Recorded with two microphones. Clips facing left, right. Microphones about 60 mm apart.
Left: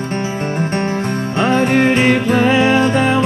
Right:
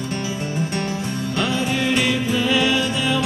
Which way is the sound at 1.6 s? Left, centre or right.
Left.